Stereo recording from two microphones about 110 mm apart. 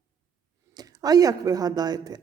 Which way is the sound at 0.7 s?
35° right (ahead or behind).